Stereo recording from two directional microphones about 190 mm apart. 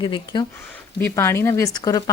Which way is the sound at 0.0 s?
25° left (ahead or behind).